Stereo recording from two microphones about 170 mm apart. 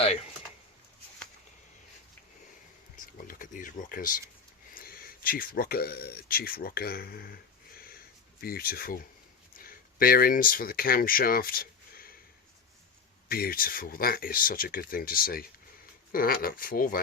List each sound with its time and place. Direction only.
3.2 s speech: 50° left (ahead or behind)
8.4 s speech: 60° left (ahead or behind)
13.2 s speech: 60° left (ahead or behind)